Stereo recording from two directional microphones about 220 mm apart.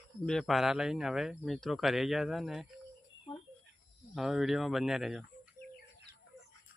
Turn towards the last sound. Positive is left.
turn(degrees=0)  # may be behind; listen again after turning